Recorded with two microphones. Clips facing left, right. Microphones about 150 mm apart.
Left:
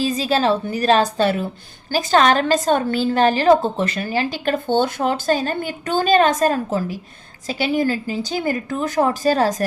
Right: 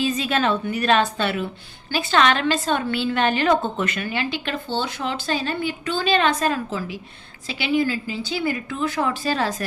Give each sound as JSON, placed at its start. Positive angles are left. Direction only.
{"t": 0.0, "sound": "a woman's voice", "side_deg": 35}